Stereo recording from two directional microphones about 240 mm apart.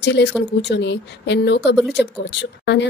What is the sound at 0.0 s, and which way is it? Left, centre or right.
Speech, left.